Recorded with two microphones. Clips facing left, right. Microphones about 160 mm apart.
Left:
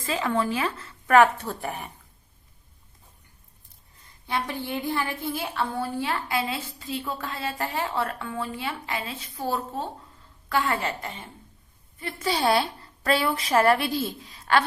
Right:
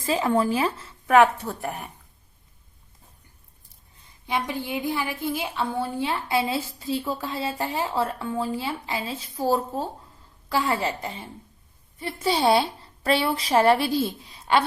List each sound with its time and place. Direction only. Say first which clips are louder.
0.0 s a woman's voice: right 4 dB; 30° right (ahead or behind)
1.0 s a woman's voice: right 1 dB; 5° right (ahead or behind)
4.3 s a woman's voice: right 2 dB; 15° right (ahead or behind)